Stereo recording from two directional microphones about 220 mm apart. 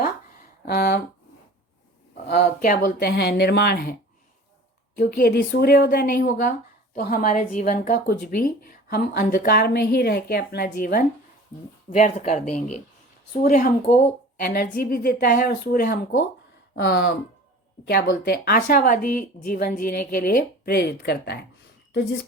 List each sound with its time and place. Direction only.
0.6 s a sound: 45° left (ahead or behind)
2.2 s speech: 45° left (ahead or behind)
4.9 s speech: 45° left (ahead or behind)
14.5 s speech: 40° left (ahead or behind)